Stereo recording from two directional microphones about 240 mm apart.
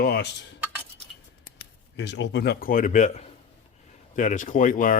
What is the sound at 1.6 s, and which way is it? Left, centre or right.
Speech, left.